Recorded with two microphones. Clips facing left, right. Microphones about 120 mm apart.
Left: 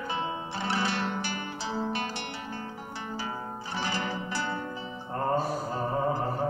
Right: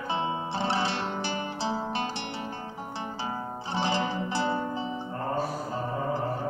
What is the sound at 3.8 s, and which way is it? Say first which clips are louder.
Zither: right 5 dB; 25° right (ahead or behind).